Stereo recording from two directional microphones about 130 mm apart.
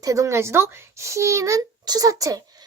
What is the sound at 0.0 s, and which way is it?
A woman's voice, 25° right (ahead or behind).